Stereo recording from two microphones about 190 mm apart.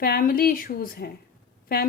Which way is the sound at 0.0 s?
50° left (ahead or behind).